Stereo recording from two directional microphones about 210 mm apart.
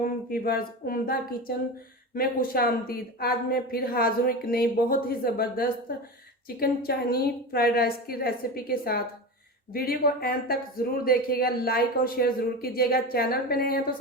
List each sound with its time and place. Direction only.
0.0 s a woman's voice: 45° left (ahead or behind)